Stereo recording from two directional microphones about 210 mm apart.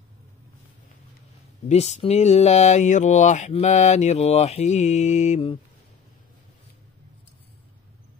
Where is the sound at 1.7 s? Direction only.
30° left (ahead or behind).